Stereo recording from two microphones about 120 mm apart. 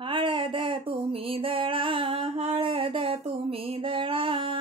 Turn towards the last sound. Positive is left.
turn(degrees=-45)  # may be behind; listen again after turning